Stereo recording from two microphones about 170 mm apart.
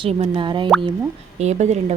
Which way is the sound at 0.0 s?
35° right (ahead or behind).